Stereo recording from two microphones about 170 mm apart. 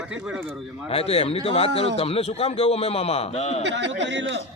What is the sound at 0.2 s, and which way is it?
Speech, 5° right (ahead or behind).